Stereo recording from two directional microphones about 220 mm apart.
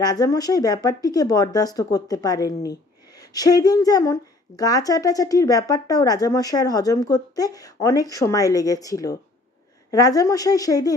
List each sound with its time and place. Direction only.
0.0 s speech: 15° left (ahead or behind)